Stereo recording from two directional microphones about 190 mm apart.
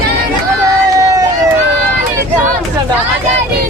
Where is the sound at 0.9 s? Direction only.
20° right (ahead or behind).